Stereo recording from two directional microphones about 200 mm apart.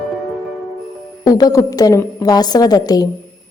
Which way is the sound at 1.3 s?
15° left (ahead or behind).